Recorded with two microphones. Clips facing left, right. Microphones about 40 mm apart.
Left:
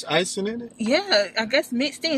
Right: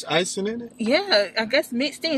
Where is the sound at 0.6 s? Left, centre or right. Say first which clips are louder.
Right 1 dB; centre.